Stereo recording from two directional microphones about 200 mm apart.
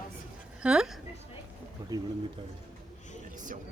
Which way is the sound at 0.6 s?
5° right (ahead or behind).